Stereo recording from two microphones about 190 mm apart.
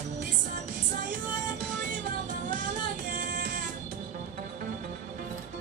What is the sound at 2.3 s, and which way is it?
Music, 45° right (ahead or behind).